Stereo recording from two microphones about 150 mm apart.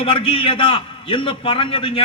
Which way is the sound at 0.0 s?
35° left (ahead or behind).